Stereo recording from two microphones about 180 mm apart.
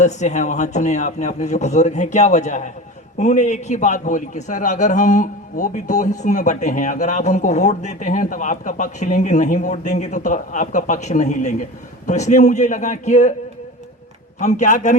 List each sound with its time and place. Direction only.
0.0 s a man's voice: 40° left (ahead or behind)
14.3 s speech: 45° left (ahead or behind)